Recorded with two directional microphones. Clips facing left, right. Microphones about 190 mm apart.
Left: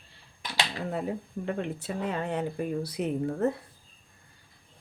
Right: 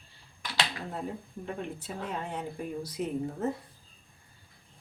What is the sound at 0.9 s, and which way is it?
Speech, 70° left (ahead or behind).